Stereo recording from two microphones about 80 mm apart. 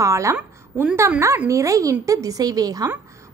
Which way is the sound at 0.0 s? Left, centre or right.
Right.